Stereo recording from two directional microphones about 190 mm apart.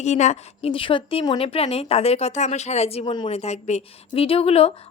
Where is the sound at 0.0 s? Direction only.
35° left (ahead or behind).